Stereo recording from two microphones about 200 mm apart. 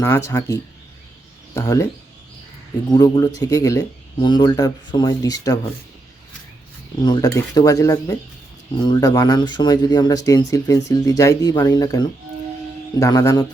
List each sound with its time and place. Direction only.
0.0 s speech: 10° left (ahead or behind)
2.9 s speech: 20° left (ahead or behind)
7.0 s speech: 20° left (ahead or behind)